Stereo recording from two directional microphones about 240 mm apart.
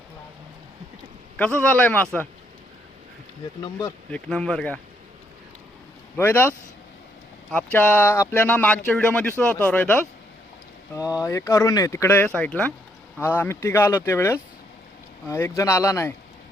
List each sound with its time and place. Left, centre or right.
1.4 s a man's voice: centre
3.6 s speech: centre
4.1 s a man's voice: centre
6.1 s speech: centre
7.5 s a man's voice: centre